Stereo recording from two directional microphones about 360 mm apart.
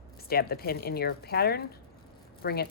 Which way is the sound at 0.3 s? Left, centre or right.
Left.